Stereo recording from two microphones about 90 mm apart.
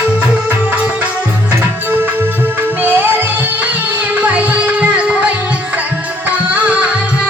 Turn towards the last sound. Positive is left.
turn(degrees=-15)  # may be behind; listen again after turning